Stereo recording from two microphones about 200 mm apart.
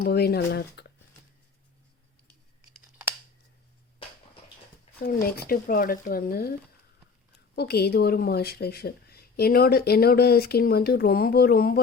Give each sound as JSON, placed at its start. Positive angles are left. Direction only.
{"t": 0.0, "sound": "speech", "side_deg": 50}
{"t": 4.9, "sound": "speech", "side_deg": 45}
{"t": 7.5, "sound": "speech", "side_deg": 55}